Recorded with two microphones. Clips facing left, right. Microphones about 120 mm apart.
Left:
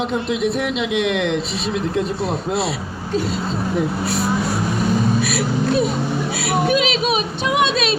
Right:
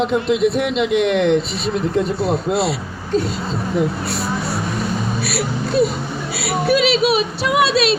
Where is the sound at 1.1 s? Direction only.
35° right (ahead or behind).